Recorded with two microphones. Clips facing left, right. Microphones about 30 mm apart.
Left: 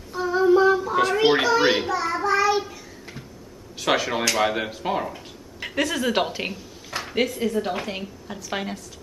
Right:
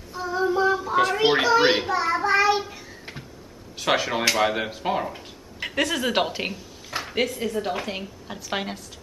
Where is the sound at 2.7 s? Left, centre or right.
Centre.